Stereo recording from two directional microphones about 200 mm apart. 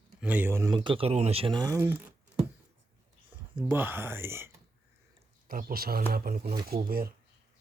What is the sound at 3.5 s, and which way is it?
Speech, 10° right (ahead or behind).